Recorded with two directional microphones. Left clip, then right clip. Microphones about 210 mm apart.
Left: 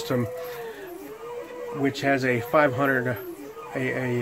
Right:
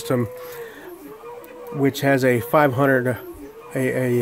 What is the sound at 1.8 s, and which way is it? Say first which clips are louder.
Speech: right 5 dB; 55° right (ahead or behind).